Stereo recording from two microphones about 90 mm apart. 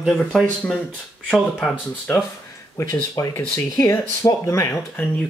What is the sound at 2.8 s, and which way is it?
Speech, 45° left (ahead or behind).